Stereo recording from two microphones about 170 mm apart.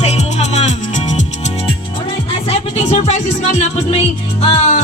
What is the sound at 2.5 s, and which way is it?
Music, 40° left (ahead or behind).